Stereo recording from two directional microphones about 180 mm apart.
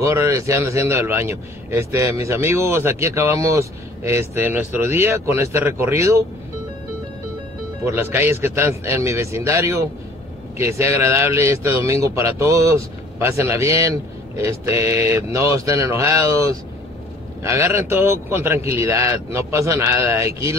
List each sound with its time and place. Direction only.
0.0 s a man's voice: 15° right (ahead or behind)
7.8 s a man's voice: 15° right (ahead or behind)